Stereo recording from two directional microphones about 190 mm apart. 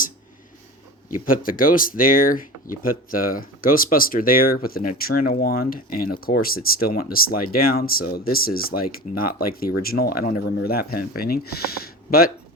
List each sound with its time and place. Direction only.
1.0 s speech: 45° left (ahead or behind)